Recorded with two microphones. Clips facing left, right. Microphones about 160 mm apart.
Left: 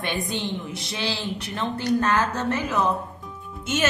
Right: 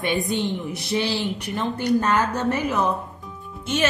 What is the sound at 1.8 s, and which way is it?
A woman's voice, 15° right (ahead or behind).